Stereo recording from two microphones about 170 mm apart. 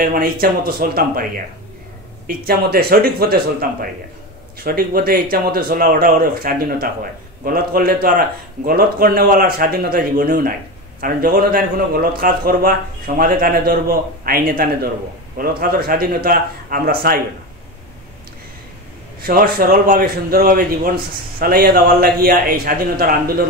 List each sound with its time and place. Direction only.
0.0 s a man's voice: 60° right (ahead or behind)
2.2 s a man's voice: 65° right (ahead or behind)
4.6 s a man's voice: 60° right (ahead or behind)
19.2 s a man's voice: 60° right (ahead or behind)